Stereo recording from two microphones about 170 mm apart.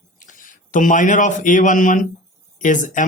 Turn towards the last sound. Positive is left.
turn(degrees=50)  # may be behind; listen again after turning